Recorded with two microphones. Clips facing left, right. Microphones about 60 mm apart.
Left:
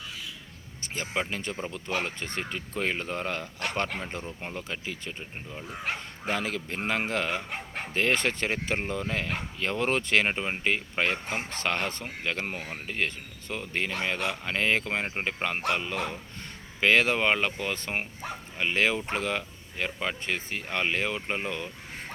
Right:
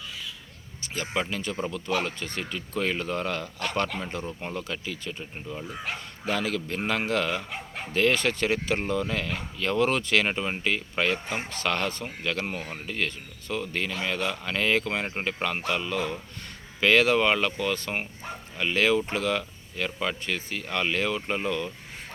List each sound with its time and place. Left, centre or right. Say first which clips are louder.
0.9 s speech: right 2 dB; left